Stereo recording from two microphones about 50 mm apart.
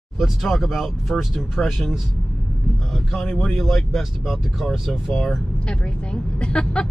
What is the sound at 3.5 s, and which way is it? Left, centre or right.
Speech, centre.